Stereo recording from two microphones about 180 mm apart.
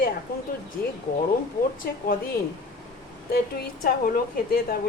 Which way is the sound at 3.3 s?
60° left (ahead or behind).